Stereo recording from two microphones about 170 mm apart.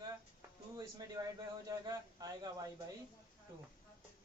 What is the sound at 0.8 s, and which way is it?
A man's voice, 20° right (ahead or behind).